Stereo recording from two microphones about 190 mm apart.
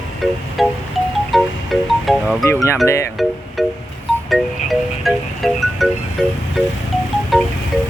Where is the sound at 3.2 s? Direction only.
Centre (ahead or behind).